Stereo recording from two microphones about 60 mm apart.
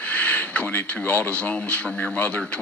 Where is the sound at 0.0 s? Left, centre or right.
Left.